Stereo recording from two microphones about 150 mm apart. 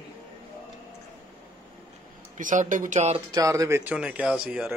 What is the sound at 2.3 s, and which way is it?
Speech, 60° right (ahead or behind).